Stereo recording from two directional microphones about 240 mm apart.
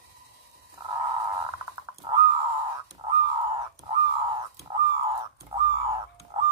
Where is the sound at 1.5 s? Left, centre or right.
Centre.